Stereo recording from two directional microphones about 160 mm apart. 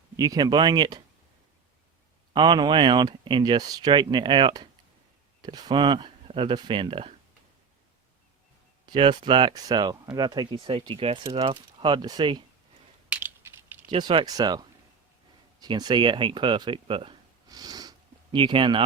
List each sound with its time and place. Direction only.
0.2 s speech: 25° right (ahead or behind)
2.3 s speech: 25° right (ahead or behind)
8.9 s speech: 30° right (ahead or behind)
13.1 s typing: 10° right (ahead or behind)
13.9 s speech: 30° right (ahead or behind)